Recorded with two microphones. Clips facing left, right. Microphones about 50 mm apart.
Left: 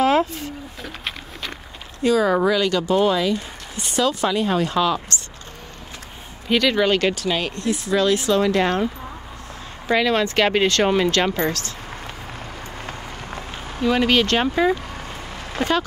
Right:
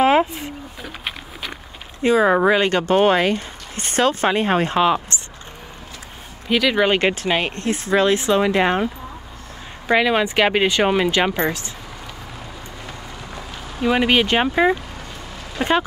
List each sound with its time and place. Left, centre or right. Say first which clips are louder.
0.0 s a sound: right 2 dB; right
0.8 s bird: right 1 dB; centre
2.0 s speech: right 2 dB; right
6.5 s speech: even; centre
6.8 s speech: right 1 dB; right
9.8 s speech: right 2 dB; centre
12.8 s run: left 2 dB; left
13.8 s speech: right 1 dB; centre